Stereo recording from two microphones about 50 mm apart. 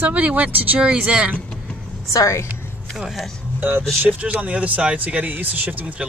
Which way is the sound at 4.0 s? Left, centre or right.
Right.